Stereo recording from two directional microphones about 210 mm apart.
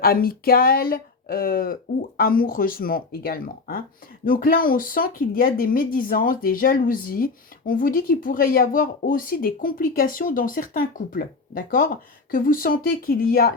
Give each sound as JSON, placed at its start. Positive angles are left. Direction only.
{"t": 0.0, "sound": "speech", "side_deg": 45}